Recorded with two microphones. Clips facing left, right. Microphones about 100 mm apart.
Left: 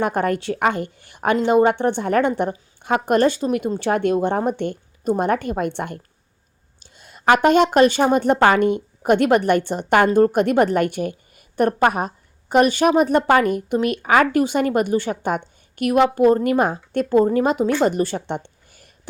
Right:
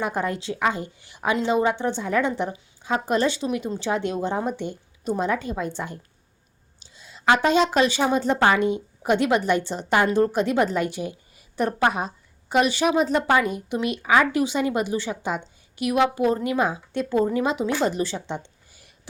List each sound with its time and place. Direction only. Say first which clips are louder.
0.0 s a woman's voice: left 6 dB; 60° left (ahead or behind)